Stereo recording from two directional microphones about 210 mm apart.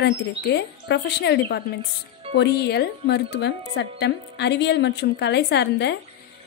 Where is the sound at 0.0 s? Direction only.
55° left (ahead or behind).